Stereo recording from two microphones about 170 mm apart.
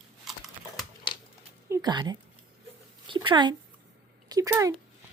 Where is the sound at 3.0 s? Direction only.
30° right (ahead or behind).